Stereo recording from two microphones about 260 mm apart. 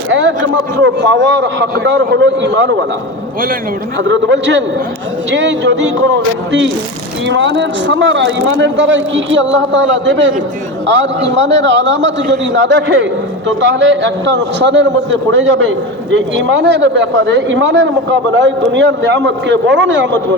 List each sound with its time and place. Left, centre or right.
0.1 s a sound: right
0.8 s speech: right
4.1 s speech: right